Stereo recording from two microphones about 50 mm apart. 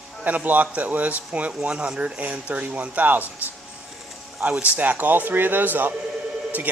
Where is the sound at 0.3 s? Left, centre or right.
Right.